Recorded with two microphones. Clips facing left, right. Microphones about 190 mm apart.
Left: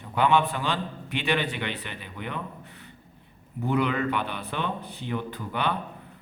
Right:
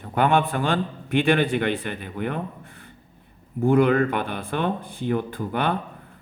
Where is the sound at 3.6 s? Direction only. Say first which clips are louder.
Right 8 dB; 50° right (ahead or behind).